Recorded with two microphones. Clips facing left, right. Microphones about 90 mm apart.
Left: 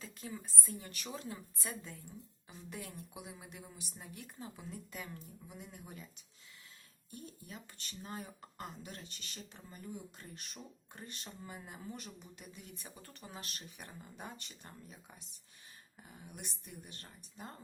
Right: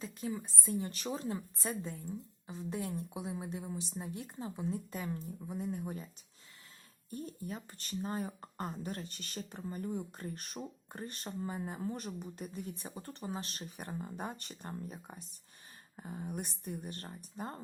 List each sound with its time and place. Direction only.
0.0 s a woman's voice: 25° right (ahead or behind)
0.7 s speech: 30° right (ahead or behind)
7.1 s speech: 40° right (ahead or behind)